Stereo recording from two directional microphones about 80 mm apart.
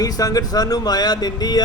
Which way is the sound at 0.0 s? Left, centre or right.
Left.